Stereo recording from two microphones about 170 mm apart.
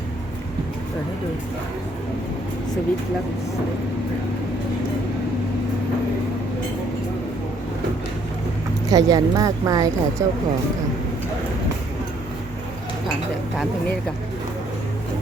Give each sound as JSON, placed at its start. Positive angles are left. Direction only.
{"t": 8.9, "sound": "speech", "side_deg": -20}